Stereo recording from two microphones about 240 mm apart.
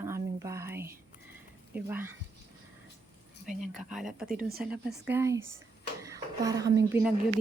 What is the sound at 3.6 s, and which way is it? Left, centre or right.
Speech, centre.